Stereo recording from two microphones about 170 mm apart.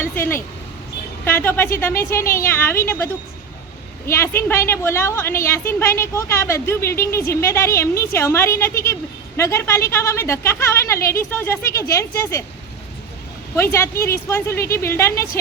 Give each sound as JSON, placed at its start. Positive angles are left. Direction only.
{"t": 0.0, "sound": "vehicle", "side_deg": 15}
{"t": 1.2, "sound": "a woman's voice", "side_deg": 10}
{"t": 13.6, "sound": "a woman's voice", "side_deg": 15}